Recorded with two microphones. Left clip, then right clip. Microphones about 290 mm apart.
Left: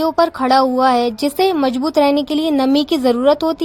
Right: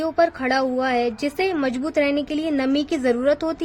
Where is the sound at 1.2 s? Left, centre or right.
Centre.